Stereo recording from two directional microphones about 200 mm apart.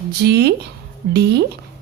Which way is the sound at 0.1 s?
55° right (ahead or behind).